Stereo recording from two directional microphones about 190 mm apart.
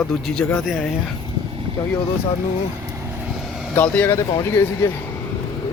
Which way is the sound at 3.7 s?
10° left (ahead or behind).